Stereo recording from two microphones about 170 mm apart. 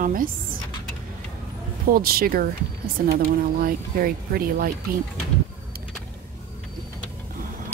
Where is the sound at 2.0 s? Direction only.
60° right (ahead or behind).